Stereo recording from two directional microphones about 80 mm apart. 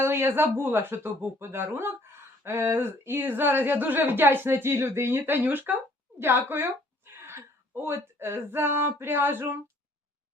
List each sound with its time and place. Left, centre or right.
0.0 s speech: right